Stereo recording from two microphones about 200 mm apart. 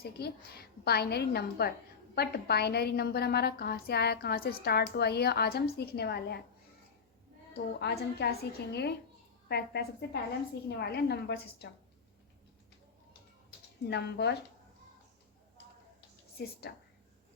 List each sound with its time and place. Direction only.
0.0 s a woman's voice: 50° left (ahead or behind)
7.5 s a woman's voice: 55° left (ahead or behind)
13.8 s a woman's voice: 55° left (ahead or behind)
16.4 s a woman's voice: 55° left (ahead or behind)